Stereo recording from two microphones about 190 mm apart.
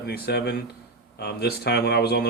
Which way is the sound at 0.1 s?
60° left (ahead or behind).